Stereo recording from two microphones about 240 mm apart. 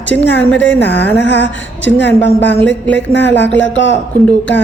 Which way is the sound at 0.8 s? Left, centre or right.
Left.